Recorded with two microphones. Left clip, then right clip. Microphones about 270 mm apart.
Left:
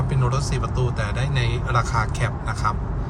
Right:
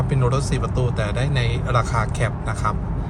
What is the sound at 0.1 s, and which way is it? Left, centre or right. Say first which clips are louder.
Speech: right 3 dB; centre.